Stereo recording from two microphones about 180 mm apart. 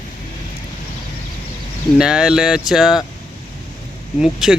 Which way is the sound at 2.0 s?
5° right (ahead or behind).